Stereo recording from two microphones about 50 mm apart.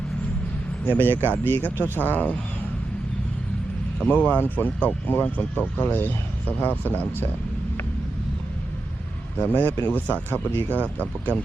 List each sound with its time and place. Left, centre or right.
0.9 s speech: left
4.0 s speech: left
9.4 s speech: left